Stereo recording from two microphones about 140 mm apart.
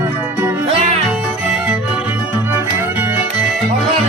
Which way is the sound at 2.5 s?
15° right (ahead or behind).